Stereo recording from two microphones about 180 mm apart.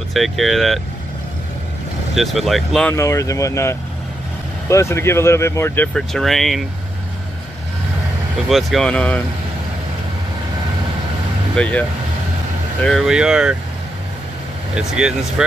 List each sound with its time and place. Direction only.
0.1 s speech: centre (ahead or behind)
2.1 s speech: centre (ahead or behind)
2.9 s speech: 15° left (ahead or behind)
5.9 s speech: centre (ahead or behind)
8.5 s speech: centre (ahead or behind)
11.5 s speech: 5° left (ahead or behind)
12.8 s speech: centre (ahead or behind)
14.8 s speech: 5° right (ahead or behind)